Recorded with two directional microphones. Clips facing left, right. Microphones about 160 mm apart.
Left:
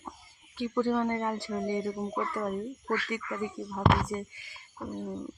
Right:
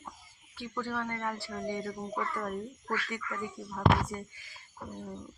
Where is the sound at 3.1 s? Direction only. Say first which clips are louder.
Left 4 dB; 20° left (ahead or behind).